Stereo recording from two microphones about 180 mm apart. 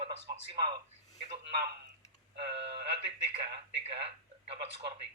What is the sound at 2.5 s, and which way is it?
Speech, 35° right (ahead or behind).